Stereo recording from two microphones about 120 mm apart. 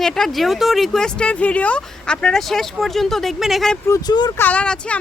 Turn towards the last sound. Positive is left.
turn(degrees=10)  # may be behind; listen again after turning